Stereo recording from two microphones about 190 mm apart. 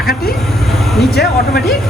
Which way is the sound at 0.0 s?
55° left (ahead or behind).